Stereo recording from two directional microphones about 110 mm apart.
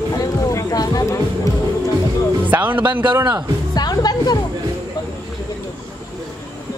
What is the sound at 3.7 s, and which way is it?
Music, 40° left (ahead or behind).